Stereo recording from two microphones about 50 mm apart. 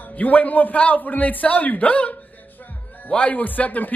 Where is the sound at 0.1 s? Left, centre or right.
Left.